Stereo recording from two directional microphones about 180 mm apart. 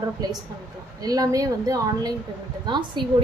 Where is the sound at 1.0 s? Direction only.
20° right (ahead or behind).